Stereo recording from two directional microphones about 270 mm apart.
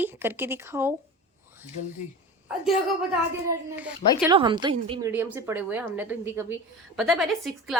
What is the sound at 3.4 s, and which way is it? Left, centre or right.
Speech, centre.